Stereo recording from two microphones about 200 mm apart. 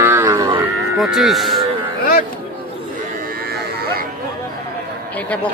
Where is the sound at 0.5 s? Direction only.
5° right (ahead or behind).